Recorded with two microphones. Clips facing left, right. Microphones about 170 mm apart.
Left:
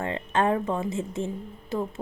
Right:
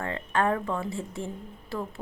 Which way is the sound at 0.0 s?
20° left (ahead or behind).